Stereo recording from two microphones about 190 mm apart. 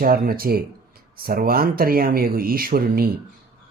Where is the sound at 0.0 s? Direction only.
50° right (ahead or behind).